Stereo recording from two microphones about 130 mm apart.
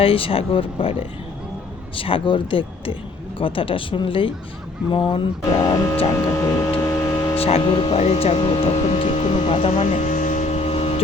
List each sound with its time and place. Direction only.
0.0 s speech: 45° left (ahead or behind)
6.1 s hum: 20° left (ahead or behind)
6.7 s a sound: 15° left (ahead or behind)
7.3 s speech: 50° left (ahead or behind)